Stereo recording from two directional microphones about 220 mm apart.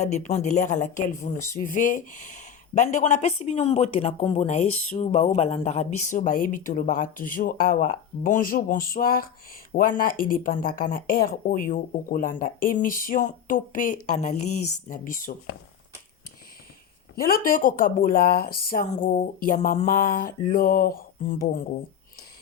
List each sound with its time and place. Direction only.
0.0 s speech: 30° left (ahead or behind)
17.2 s speech: 40° left (ahead or behind)